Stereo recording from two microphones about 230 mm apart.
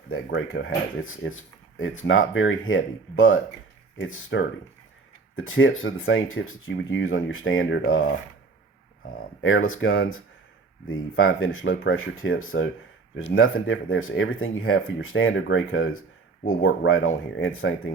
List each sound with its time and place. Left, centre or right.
0.1 s speech: left
9.4 s speech: left